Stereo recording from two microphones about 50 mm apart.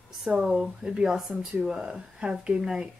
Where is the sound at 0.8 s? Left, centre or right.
Centre.